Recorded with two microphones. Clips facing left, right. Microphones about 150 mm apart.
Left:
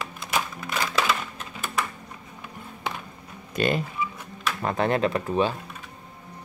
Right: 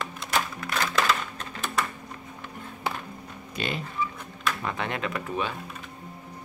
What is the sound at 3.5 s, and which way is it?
Speech, 50° left (ahead or behind).